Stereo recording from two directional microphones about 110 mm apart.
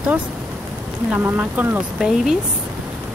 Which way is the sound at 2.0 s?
5° right (ahead or behind).